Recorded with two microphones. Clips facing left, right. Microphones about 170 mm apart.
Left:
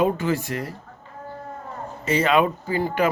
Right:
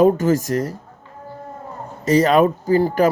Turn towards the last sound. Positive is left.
turn(degrees=-40)  # may be behind; listen again after turning